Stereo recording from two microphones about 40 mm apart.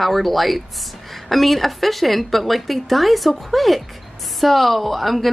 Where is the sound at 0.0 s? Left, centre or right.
Centre.